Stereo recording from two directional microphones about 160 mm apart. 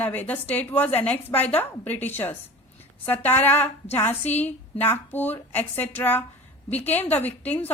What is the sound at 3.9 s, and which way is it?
A woman's voice, 15° left (ahead or behind).